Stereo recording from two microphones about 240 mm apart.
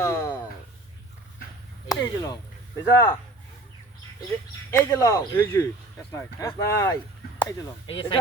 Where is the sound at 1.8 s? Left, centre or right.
Centre.